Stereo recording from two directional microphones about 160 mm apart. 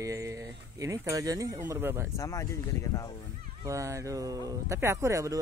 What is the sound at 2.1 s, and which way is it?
Speech, 20° left (ahead or behind).